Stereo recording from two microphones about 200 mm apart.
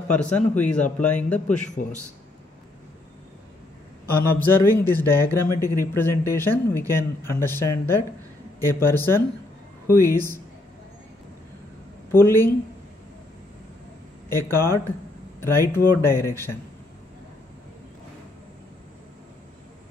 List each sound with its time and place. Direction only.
0.1 s a man's voice: 5° left (ahead or behind)
4.1 s speech: 10° left (ahead or behind)
12.1 s speech: 10° left (ahead or behind)
14.3 s speech: 10° left (ahead or behind)